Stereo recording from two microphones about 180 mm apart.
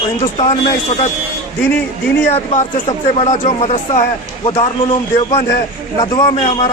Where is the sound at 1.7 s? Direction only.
10° left (ahead or behind).